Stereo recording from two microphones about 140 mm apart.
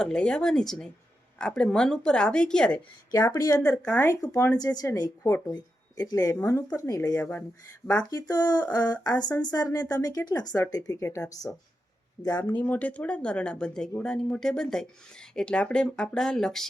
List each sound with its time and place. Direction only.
0.0 s speech: 5° left (ahead or behind)
3.1 s a woman's voice: 25° left (ahead or behind)
3.8 s speech: 10° left (ahead or behind)
4.1 s a woman's voice: 25° left (ahead or behind)
7.2 s speech: 10° left (ahead or behind)
8.1 s a woman's voice: 30° left (ahead or behind)
11.0 s speech: 10° left (ahead or behind)
12.2 s a woman's voice: 25° left (ahead or behind)
12.5 s speech: 10° left (ahead or behind)